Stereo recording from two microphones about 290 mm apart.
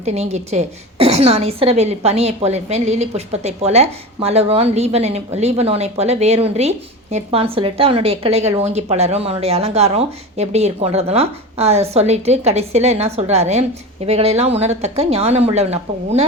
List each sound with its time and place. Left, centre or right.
0.0 s a woman's voice: right